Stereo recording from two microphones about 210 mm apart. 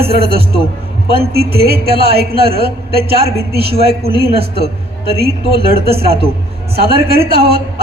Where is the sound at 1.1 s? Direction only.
45° right (ahead or behind).